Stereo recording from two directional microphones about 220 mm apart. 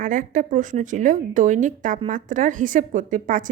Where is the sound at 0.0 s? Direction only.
35° right (ahead or behind).